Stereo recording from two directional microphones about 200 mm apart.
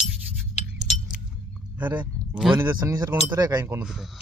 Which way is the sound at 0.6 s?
30° left (ahead or behind).